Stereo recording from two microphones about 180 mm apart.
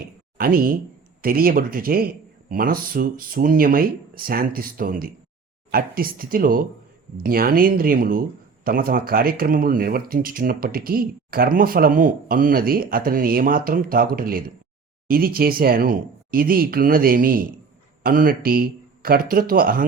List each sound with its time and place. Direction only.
0.0 s speech: 55° right (ahead or behind)